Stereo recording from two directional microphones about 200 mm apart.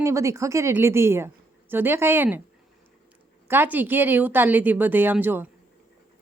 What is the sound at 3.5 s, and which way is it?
Speech, 10° right (ahead or behind).